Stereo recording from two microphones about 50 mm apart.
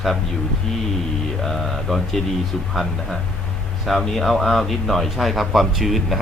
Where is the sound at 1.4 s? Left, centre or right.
Centre.